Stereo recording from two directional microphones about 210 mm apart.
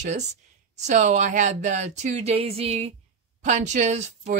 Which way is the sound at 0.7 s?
35° right (ahead or behind).